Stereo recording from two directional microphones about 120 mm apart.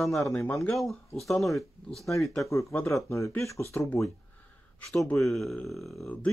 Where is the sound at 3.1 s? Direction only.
25° left (ahead or behind).